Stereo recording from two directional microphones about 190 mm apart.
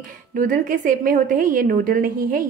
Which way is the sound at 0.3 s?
45° right (ahead or behind).